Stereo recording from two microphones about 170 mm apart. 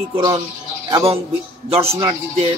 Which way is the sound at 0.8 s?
30° right (ahead or behind).